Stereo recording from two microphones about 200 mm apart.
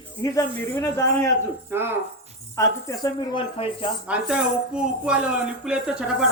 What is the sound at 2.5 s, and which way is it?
Speech, 15° left (ahead or behind).